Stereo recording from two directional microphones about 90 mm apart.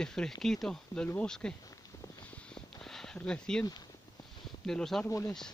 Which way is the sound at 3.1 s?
10° left (ahead or behind).